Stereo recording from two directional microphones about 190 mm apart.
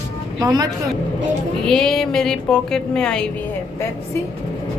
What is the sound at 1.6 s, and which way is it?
A woman's voice, 5° left (ahead or behind).